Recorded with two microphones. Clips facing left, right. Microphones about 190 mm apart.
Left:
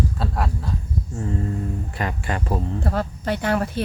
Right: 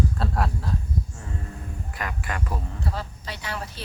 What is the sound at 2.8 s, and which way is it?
Speech, 55° left (ahead or behind).